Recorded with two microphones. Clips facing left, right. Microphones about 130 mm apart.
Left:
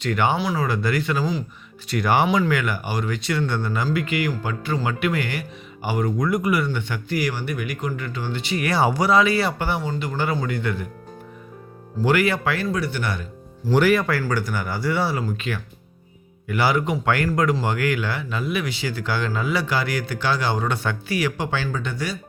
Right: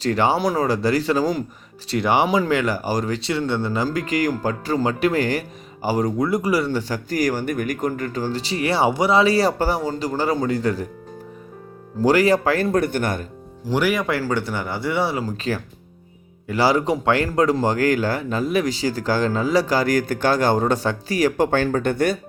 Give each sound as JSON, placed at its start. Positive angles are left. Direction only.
{"t": 0.0, "sound": "speech", "side_deg": -30}
{"t": 0.3, "sound": "speech", "side_deg": -40}
{"t": 3.8, "sound": "speech", "side_deg": -35}
{"t": 12.0, "sound": "speech", "side_deg": -35}
{"t": 12.6, "sound": "speech", "side_deg": -50}
{"t": 13.7, "sound": "speech", "side_deg": -10}
{"t": 14.1, "sound": "speech", "side_deg": -25}
{"t": 15.2, "sound": "speech", "side_deg": -35}